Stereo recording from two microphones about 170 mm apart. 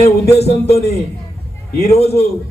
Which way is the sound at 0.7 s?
40° left (ahead or behind).